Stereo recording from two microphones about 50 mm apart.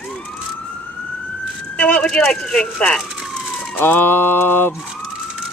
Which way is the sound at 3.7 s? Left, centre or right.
Left.